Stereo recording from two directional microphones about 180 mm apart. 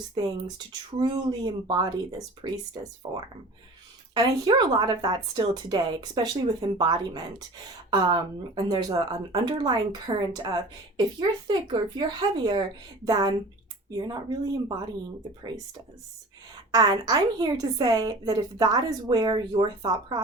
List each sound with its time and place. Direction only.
0.1 s speech: 20° right (ahead or behind)
13.1 s speech: 20° right (ahead or behind)
16.7 s speech: 20° right (ahead or behind)